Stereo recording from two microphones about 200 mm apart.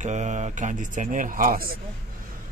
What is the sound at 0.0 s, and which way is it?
A man's voice, 35° right (ahead or behind).